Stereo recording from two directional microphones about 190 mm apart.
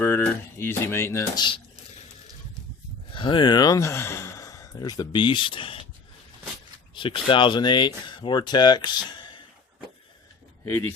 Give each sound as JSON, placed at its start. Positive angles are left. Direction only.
{"t": 0.0, "sound": "speech", "side_deg": 10}
{"t": 3.1, "sound": "speech", "side_deg": 25}
{"t": 6.9, "sound": "speech", "side_deg": 25}